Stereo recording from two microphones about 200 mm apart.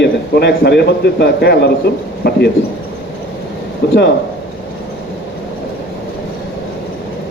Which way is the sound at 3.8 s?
60° left (ahead or behind).